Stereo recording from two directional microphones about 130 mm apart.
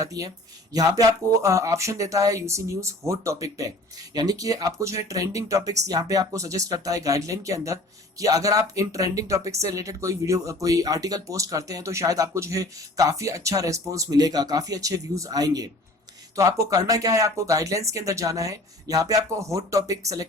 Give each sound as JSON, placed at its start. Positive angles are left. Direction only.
{"t": 0.0, "sound": "speech", "side_deg": -25}